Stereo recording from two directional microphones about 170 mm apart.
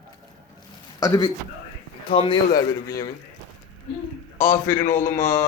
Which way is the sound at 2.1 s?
30° left (ahead or behind).